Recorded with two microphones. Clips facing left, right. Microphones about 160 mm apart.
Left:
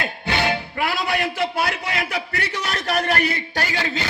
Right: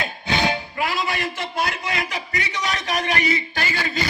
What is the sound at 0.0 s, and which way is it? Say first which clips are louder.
Music: even; 60° left (ahead or behind).